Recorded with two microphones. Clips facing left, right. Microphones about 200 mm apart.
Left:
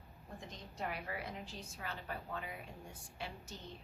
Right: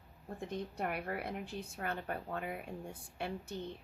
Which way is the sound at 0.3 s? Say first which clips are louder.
Right 8 dB; 55° right (ahead or behind).